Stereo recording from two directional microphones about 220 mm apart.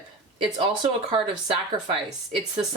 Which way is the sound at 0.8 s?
25° right (ahead or behind).